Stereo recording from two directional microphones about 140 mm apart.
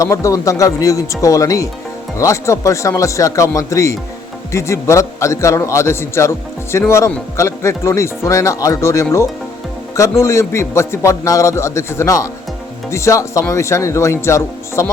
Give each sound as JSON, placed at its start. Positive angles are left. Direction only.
{"t": 0.0, "sound": "a man's voice", "side_deg": 20}